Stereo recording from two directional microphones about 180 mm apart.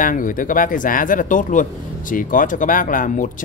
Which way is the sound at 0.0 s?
50° left (ahead or behind).